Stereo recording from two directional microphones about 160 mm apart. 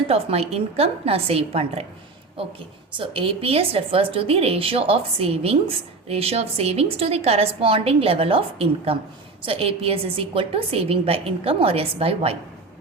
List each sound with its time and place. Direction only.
0.1 s a woman's voice: 40° right (ahead or behind)